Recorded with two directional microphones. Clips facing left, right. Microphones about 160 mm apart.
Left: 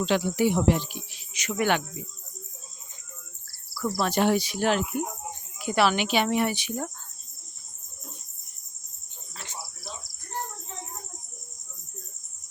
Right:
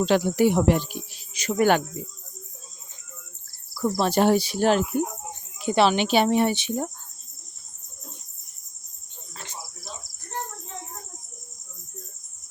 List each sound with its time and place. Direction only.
0.0 s speech: 45° right (ahead or behind)
3.8 s cricket: 20° right (ahead or behind)
4.1 s speech: 35° right (ahead or behind)
5.5 s speech: 25° right (ahead or behind)